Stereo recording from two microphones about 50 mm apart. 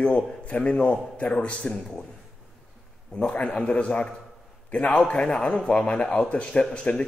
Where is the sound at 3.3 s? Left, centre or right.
Left.